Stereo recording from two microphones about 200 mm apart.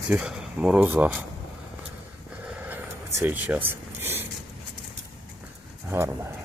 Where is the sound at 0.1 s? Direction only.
5° right (ahead or behind).